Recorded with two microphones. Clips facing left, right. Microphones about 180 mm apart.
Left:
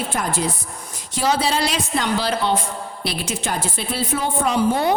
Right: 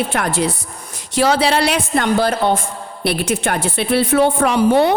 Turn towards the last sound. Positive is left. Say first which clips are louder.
# right 6 dB
turn(degrees=-70)  # may be behind; listen again after turning